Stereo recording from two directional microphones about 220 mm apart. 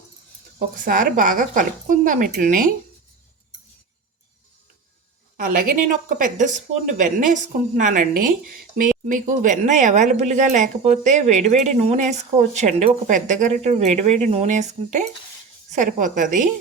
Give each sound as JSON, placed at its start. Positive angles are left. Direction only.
{"t": 0.9, "sound": "speech", "side_deg": -40}
{"t": 5.4, "sound": "speech", "side_deg": -40}